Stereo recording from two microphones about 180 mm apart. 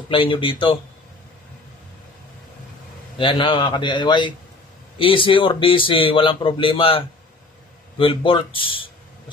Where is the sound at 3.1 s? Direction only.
25° left (ahead or behind).